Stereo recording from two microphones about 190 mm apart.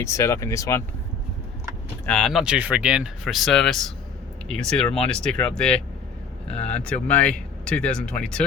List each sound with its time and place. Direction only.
0.0 s speech: 15° left (ahead or behind)
2.0 s speech: 5° left (ahead or behind)